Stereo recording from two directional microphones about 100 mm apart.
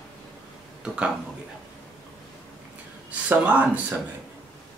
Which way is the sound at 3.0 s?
15° right (ahead or behind).